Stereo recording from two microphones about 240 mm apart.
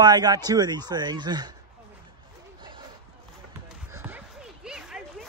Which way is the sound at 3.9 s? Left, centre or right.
Centre.